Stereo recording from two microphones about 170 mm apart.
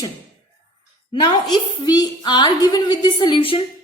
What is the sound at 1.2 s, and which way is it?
A woman's voice, 25° left (ahead or behind).